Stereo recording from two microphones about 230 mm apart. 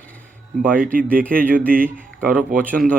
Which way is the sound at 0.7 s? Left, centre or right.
Right.